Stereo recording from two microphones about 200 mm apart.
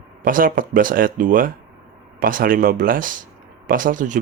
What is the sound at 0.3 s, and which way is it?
Speech, 45° right (ahead or behind).